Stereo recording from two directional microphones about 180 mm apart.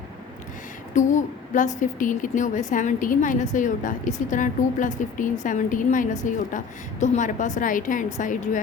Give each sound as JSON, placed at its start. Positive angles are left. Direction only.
{"t": 0.9, "sound": "a woman's voice", "side_deg": 45}